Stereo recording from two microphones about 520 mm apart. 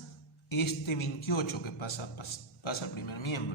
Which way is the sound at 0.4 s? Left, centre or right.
Left.